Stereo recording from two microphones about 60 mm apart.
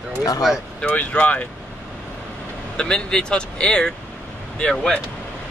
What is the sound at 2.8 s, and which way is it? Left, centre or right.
Speech, centre.